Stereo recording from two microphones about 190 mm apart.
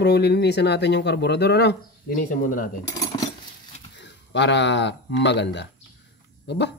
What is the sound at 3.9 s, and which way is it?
Speech, 65° left (ahead or behind).